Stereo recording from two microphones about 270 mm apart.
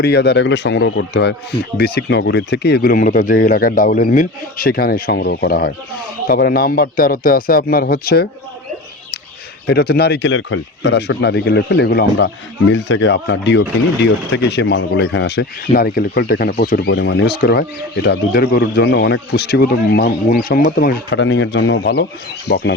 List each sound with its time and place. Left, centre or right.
0.0 s speech: left
9.6 s speech: left